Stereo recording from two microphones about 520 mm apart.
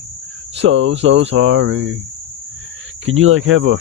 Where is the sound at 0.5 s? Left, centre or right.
Right.